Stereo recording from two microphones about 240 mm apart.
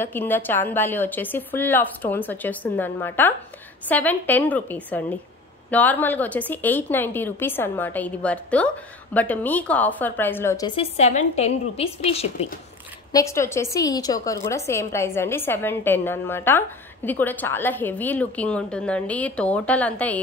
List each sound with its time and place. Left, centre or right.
0.0 s a woman's voice: centre
10.8 s a woman's voice: left
13.1 s a woman's voice: centre